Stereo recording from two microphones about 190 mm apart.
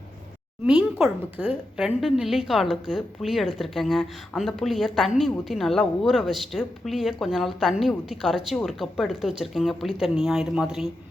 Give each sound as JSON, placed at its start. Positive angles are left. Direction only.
{"t": 0.6, "sound": "a woman's voice", "side_deg": -10}